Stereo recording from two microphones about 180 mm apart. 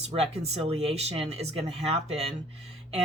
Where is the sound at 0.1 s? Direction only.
35° right (ahead or behind).